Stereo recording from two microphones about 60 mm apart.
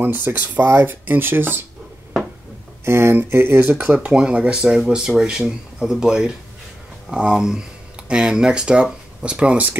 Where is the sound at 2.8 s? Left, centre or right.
Right.